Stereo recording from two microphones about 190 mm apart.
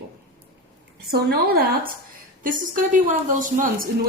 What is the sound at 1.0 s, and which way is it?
A woman's voice, 55° right (ahead or behind).